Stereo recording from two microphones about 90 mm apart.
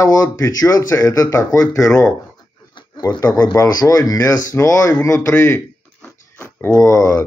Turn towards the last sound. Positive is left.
turn(degrees=40)  # may be behind; listen again after turning